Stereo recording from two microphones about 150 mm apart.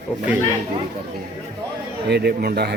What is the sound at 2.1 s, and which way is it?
Speech, 90° right.